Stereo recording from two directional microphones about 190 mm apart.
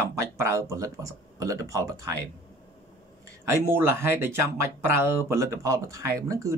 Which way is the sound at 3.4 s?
15° right (ahead or behind).